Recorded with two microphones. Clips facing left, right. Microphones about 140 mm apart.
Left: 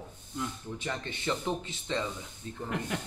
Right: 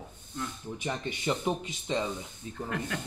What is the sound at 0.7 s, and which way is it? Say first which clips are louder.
Speech: right 5 dB; 15° right (ahead or behind).